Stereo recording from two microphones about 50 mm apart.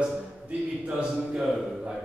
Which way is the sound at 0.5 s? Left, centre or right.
Right.